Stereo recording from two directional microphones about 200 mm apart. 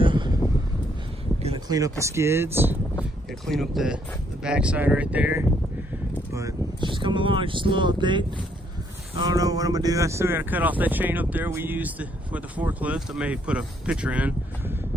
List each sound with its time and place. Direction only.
0.0 s a sound: 25° right (ahead or behind)
1.4 s a sound: 30° right (ahead or behind)
1.6 s speech: 15° right (ahead or behind)
3.0 s speech: centre (ahead or behind)
6.3 s speech: 20° right (ahead or behind)
9.2 s speech: 20° right (ahead or behind)